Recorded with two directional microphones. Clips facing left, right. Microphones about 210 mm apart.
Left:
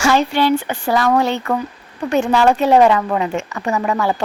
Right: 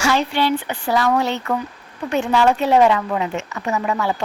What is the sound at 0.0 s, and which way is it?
A woman's voice, 45° left (ahead or behind).